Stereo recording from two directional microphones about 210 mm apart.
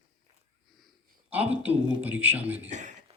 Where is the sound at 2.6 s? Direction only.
35° right (ahead or behind).